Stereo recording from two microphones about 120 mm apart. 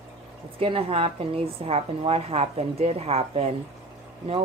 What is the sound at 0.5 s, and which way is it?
Speech, 50° right (ahead or behind).